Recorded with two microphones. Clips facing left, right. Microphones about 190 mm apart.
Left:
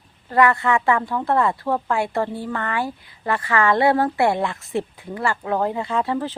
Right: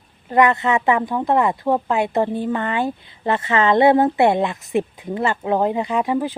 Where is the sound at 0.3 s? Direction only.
20° right (ahead or behind).